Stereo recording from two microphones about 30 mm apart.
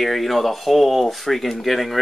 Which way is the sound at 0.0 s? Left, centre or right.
Centre.